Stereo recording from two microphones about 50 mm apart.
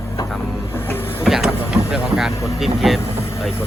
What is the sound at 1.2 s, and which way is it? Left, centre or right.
Speech, centre.